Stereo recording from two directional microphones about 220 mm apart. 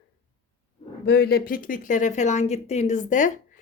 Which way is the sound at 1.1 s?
45° left (ahead or behind).